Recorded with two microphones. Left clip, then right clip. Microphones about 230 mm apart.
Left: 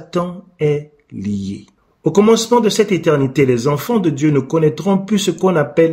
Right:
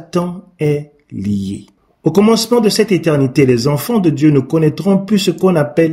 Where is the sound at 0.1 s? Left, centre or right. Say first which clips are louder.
Right 1 dB; right.